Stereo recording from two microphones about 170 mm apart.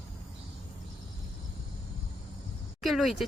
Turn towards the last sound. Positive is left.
turn(degrees=0)  # may be behind; listen again after turning